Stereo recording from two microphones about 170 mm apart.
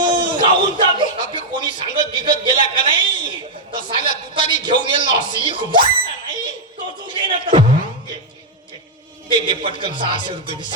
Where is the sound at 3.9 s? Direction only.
30° right (ahead or behind).